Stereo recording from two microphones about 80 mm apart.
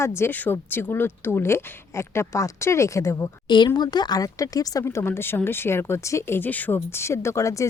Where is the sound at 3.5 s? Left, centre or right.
Left.